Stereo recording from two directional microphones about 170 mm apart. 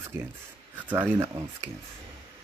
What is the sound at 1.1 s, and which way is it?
Speech, 20° right (ahead or behind).